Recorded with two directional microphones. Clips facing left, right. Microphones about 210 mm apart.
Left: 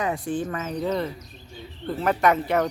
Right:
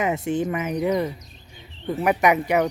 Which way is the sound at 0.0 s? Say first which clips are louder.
Right 3 dB; 20° right (ahead or behind).